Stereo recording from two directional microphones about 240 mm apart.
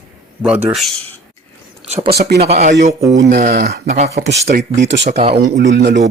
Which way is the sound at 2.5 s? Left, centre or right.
Right.